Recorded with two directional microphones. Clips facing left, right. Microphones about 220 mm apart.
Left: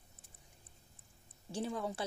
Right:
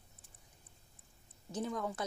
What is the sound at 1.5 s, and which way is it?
Speech, 30° left (ahead or behind).